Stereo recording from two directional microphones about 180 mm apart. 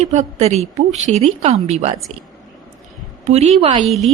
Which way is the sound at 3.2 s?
35° right (ahead or behind).